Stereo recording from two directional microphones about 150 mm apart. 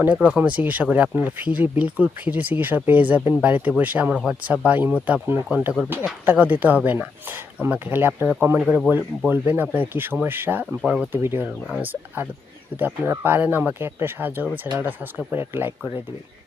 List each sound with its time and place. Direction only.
0.0 s speech: 10° right (ahead or behind)
8.9 s speech: 15° right (ahead or behind)
11.1 s speech: 15° right (ahead or behind)